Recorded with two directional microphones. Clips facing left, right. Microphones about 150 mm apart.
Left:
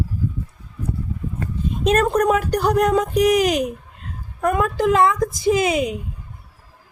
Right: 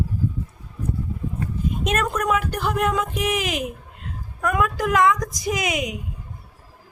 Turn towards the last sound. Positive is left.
turn(degrees=30)  # may be behind; listen again after turning